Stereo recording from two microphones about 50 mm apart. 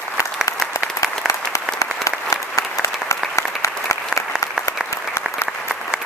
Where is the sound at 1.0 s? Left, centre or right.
Left.